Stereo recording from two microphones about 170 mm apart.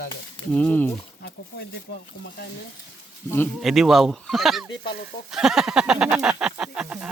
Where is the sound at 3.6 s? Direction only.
Centre (ahead or behind).